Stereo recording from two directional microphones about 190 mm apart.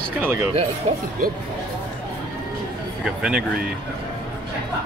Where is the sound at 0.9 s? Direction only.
35° right (ahead or behind).